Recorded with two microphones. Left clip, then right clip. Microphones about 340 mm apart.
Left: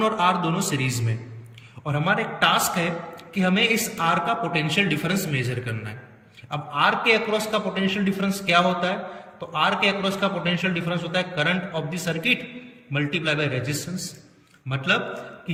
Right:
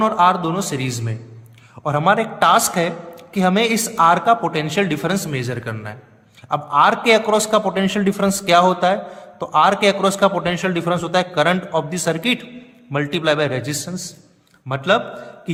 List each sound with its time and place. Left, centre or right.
0.0 s speech: centre